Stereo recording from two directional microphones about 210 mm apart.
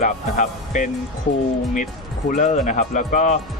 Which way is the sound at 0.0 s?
35° left (ahead or behind).